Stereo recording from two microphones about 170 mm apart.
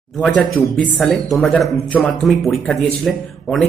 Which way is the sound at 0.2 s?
5° left (ahead or behind).